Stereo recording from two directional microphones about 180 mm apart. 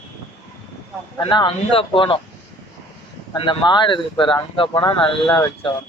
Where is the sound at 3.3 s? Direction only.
25° left (ahead or behind).